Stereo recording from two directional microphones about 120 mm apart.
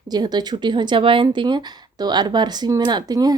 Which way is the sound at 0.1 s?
35° right (ahead or behind).